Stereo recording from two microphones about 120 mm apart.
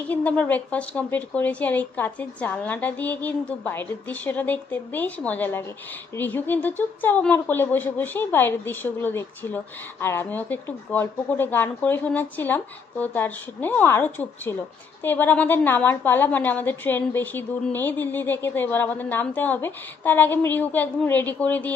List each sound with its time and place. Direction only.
0.1 s a woman's voice: 10° left (ahead or behind)